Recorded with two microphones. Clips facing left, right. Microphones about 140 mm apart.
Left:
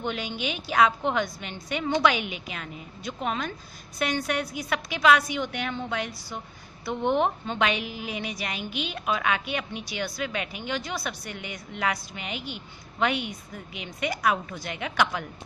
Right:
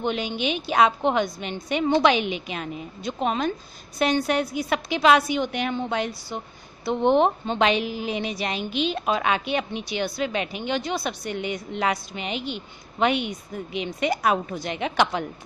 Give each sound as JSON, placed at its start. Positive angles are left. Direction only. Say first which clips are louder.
{"t": 0.0, "sound": "a woman's voice", "louder": "right 5 dB", "side_deg": -20}